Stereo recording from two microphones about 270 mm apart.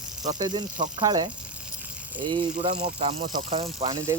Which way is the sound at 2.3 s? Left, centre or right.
Right.